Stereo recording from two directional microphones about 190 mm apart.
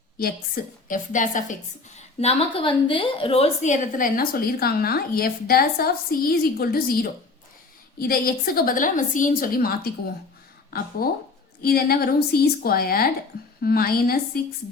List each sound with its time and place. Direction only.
0.2 s a woman's voice: 50° left (ahead or behind)
2.0 s a woman's voice: 30° left (ahead or behind); by 9.9 s 50° left (ahead or behind)
11.6 s a woman's voice: 50° left (ahead or behind)